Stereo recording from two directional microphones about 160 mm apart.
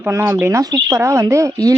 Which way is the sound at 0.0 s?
15° right (ahead or behind).